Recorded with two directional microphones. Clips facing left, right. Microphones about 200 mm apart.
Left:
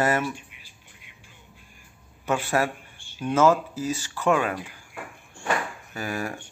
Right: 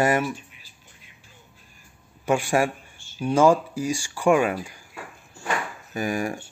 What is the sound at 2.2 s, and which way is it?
Speech, 15° right (ahead or behind).